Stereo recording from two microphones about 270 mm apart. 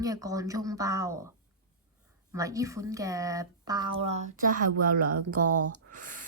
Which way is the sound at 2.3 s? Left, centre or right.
Centre.